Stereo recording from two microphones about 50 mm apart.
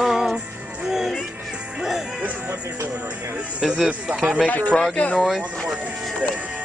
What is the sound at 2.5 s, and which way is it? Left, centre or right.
Speech, right.